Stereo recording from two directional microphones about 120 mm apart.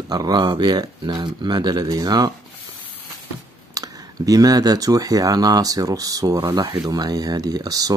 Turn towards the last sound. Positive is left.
turn(degrees=-30)  # may be behind; listen again after turning